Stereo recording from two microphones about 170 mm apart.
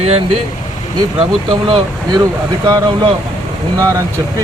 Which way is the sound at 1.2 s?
30° right (ahead or behind).